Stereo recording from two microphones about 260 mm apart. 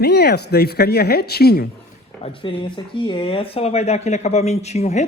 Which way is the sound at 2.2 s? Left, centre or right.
Centre.